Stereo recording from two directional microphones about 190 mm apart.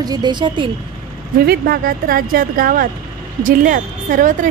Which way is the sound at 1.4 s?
55° right (ahead or behind).